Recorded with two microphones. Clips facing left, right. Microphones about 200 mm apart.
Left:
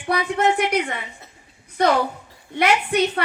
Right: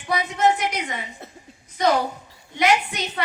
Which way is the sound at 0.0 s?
60° left (ahead or behind).